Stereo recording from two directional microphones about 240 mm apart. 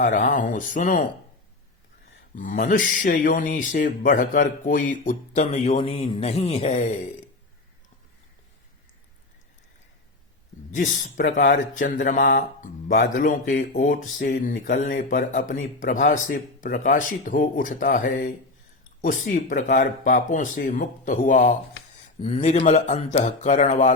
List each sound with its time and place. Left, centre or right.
0.0 s speech: left
2.3 s speech: left
10.7 s speech: left